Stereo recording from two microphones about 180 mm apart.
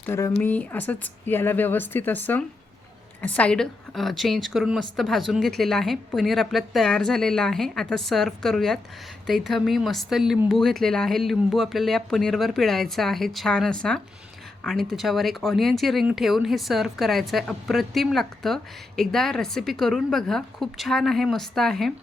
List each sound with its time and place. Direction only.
0.0 s a woman's voice: 15° left (ahead or behind)